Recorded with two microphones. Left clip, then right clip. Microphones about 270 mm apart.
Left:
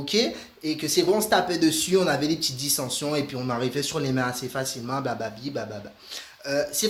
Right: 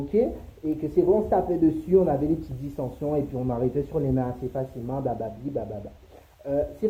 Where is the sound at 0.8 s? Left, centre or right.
Left.